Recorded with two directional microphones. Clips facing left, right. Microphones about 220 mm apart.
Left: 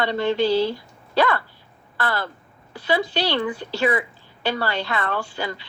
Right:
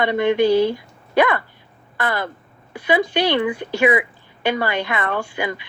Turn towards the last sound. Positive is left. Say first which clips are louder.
# right 3 dB
turn(degrees=-15)  # may be behind; listen again after turning